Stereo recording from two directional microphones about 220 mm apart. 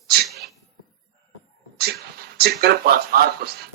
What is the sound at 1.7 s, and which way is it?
Speech, 45° right (ahead or behind).